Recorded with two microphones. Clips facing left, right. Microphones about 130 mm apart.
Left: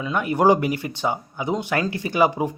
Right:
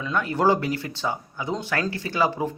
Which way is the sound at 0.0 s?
15° left (ahead or behind).